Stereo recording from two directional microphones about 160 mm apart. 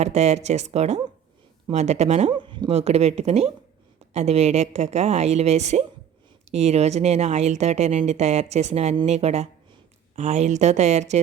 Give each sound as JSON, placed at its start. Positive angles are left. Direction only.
{"t": 0.0, "sound": "speech", "side_deg": -45}
{"t": 2.3, "sound": "speech", "side_deg": -30}